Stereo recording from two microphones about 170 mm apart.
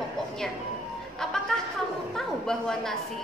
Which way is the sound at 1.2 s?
5° left (ahead or behind).